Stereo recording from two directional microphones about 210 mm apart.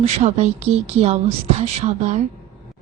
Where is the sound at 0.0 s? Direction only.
30° right (ahead or behind).